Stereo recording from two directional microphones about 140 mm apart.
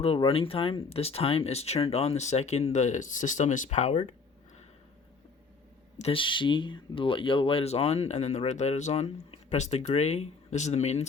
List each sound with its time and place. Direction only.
0.2 s speech: 40° left (ahead or behind)
6.0 s speech: 40° left (ahead or behind)